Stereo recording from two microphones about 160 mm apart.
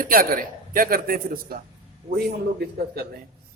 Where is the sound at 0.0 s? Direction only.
60° right (ahead or behind).